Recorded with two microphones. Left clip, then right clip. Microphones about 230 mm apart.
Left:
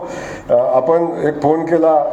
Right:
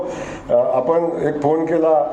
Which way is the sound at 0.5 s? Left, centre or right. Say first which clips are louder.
Left 3 dB; left.